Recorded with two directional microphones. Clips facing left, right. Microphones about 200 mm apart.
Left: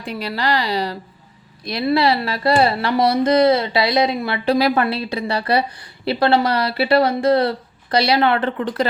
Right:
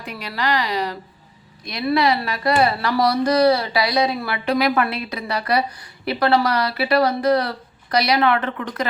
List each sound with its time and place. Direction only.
0.0 s a woman's voice: 30° left (ahead or behind)